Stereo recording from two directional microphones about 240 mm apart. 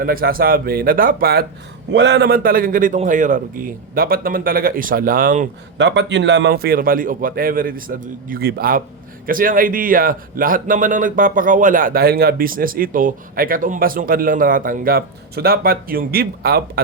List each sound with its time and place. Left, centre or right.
0.0 s speech: right
5.7 s speech: right